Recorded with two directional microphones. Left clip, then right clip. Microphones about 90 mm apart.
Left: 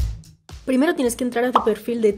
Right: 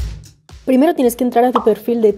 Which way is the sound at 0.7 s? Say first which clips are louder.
Right 6 dB; 45° right (ahead or behind).